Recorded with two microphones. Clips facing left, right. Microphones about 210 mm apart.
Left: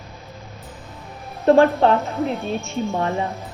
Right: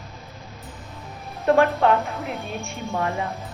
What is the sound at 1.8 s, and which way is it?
A woman's voice, 30° left (ahead or behind).